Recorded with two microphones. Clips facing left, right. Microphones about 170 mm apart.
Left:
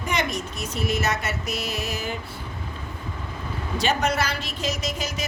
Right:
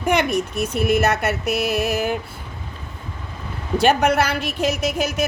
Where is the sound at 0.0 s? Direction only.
55° right (ahead or behind).